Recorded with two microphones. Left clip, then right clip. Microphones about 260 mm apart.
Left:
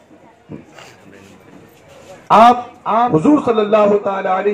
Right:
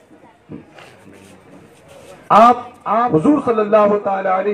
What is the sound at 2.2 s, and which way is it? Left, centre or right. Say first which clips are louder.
A man's voice: left 1 dB; left.